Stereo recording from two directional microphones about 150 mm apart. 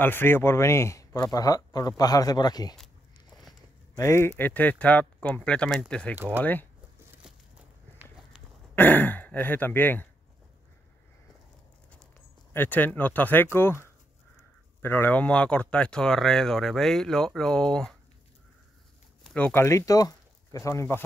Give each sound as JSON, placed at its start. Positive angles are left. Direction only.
{"t": 0.0, "sound": "speech", "side_deg": 15}
{"t": 3.9, "sound": "speech", "side_deg": 20}
{"t": 6.1, "sound": "speech", "side_deg": -10}
{"t": 6.4, "sound": "speech", "side_deg": 10}
{"t": 8.7, "sound": "speech", "side_deg": 10}
{"t": 12.5, "sound": "speech", "side_deg": 10}
{"t": 19.3, "sound": "speech", "side_deg": 15}